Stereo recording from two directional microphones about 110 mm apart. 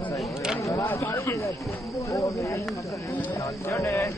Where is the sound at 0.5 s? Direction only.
25° left (ahead or behind).